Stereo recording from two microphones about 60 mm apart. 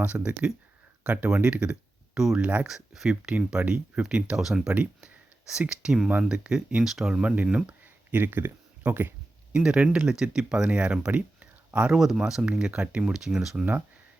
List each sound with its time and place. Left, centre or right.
0.0 s speech: right
2.4 s speech: right
2.6 s speech: centre
3.3 s speech: centre
4.9 s a sound: centre
6.1 s speech: right
6.3 s speech: centre
7.2 s speech: centre
8.1 s speech: right
9.5 s speech: centre
11.9 s speech: centre